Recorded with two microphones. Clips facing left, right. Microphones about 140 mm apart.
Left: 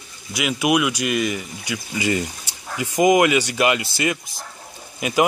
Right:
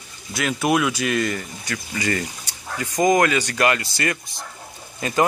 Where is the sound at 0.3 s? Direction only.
5° left (ahead or behind).